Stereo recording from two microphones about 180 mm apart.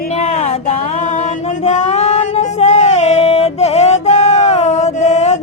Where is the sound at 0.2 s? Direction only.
35° left (ahead or behind).